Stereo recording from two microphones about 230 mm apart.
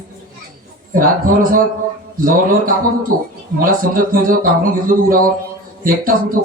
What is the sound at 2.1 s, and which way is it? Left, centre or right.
Speech, right.